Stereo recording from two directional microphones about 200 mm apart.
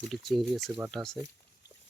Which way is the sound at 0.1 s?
Centre (ahead or behind).